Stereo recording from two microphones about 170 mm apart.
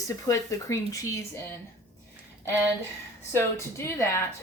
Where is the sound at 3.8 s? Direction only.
15° left (ahead or behind).